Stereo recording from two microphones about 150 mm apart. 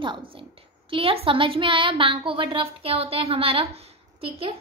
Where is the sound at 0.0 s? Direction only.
35° right (ahead or behind).